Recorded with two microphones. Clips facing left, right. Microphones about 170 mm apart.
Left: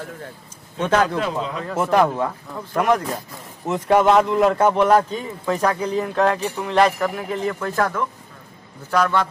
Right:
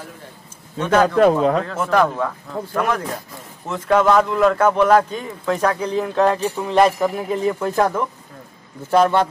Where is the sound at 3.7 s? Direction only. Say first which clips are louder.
Even; 10° left (ahead or behind).